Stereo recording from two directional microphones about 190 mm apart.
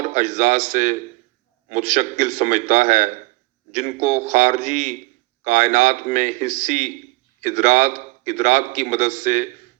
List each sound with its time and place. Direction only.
0.0 s a man's voice: 40° right (ahead or behind)